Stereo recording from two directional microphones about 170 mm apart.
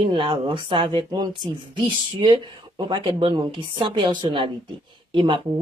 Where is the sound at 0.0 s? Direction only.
30° right (ahead or behind).